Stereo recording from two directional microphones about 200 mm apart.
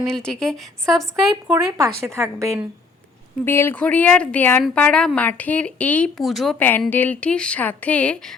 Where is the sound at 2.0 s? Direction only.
15° right (ahead or behind).